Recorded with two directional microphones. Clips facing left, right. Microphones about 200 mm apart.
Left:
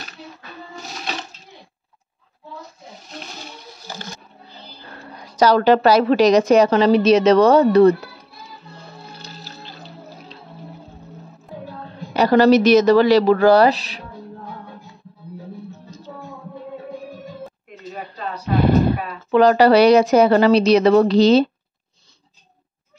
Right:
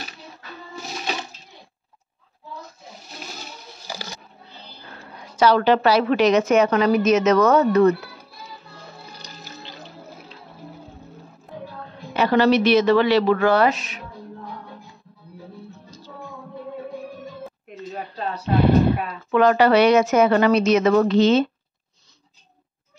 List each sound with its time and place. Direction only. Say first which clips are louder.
3.8 s goat: even; 10° right (ahead or behind)
4.9 s a woman's voice: left 4 dB; 40° left (ahead or behind)
12.1 s a woman's voice: left 4 dB; 40° left (ahead or behind)
18.9 s a woman's voice: left 1 dB; 35° left (ahead or behind)